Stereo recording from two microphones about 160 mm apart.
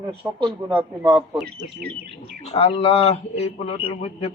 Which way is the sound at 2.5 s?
40° left (ahead or behind).